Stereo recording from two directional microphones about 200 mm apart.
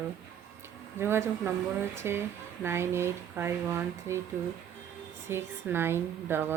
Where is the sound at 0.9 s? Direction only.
10° right (ahead or behind).